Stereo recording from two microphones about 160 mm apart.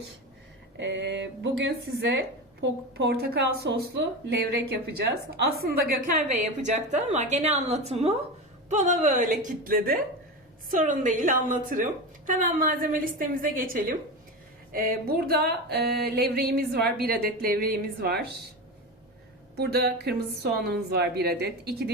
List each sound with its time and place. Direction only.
0.8 s speech: 90° right; by 6.1 s 70° right (ahead or behind)
6.9 s a woman's voice: 45° right (ahead or behind); by 10.0 s 65° right (ahead or behind)
10.7 s a woman's voice: 55° right (ahead or behind)
14.7 s a sound: 65° right (ahead or behind)
19.5 s speech: 80° right